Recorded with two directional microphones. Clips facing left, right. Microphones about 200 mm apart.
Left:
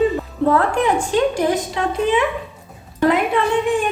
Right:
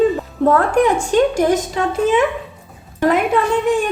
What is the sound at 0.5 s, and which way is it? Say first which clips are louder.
A woman's voice: right 3 dB; 45° right (ahead or behind).